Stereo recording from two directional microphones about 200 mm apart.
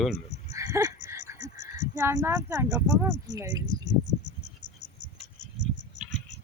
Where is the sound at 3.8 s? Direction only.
60° right (ahead or behind).